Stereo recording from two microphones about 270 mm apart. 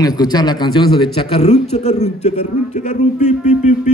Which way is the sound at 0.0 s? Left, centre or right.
Centre.